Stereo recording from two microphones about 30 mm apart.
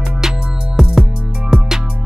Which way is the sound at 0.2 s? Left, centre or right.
Centre.